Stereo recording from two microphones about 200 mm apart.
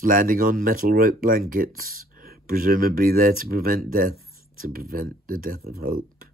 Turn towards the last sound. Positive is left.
turn(degrees=-45)  # may be behind; listen again after turning